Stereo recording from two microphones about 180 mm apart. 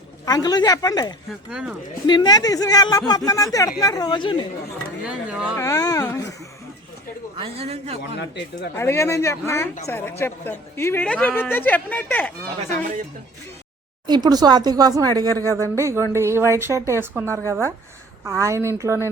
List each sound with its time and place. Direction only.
0.3 s speech: 20° left (ahead or behind)
1.5 s speech: 5° right (ahead or behind)
2.0 s speech: 25° left (ahead or behind)
5.0 s speech: 5° right (ahead or behind)
5.5 s a woman's voice: 15° left (ahead or behind)
7.3 s a man's voice: 35° right (ahead or behind)
8.7 s a woman's voice: 15° left (ahead or behind)
14.1 s a woman's voice: 20° right (ahead or behind)